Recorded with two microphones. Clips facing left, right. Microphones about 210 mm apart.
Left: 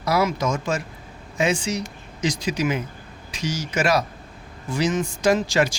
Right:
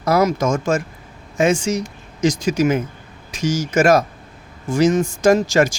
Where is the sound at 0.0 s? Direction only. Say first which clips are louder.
Right 5 dB; 45° right (ahead or behind).